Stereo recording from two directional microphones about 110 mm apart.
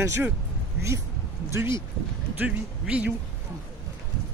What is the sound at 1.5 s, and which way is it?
Speech, 25° right (ahead or behind).